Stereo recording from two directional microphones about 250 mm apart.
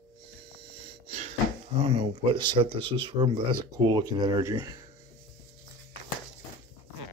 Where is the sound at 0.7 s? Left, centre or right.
Right.